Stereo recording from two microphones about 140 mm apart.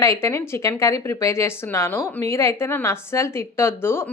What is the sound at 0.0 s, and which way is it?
Speech, 20° left (ahead or behind).